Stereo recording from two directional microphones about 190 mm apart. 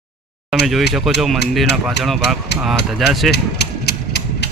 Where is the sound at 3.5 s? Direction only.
60° left (ahead or behind).